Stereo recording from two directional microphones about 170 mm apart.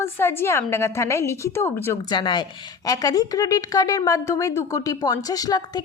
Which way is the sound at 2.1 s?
25° left (ahead or behind).